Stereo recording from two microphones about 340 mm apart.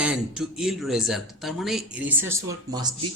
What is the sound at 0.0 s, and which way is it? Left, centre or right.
Speech, centre.